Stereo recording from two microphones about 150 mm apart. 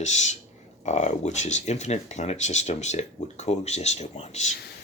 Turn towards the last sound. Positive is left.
turn(degrees=50)  # may be behind; listen again after turning